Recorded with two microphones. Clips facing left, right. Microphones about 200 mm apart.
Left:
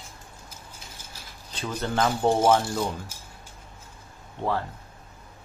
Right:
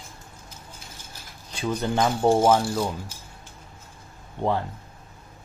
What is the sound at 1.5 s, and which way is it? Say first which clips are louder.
Speech: right 3 dB; 10° right (ahead or behind).